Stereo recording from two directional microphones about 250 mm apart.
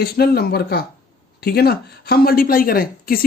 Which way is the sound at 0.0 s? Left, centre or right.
Left.